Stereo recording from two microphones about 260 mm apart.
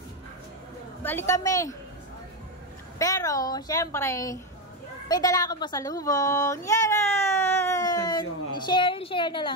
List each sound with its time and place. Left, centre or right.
1.0 s a woman's voice: centre
3.0 s a woman's voice: centre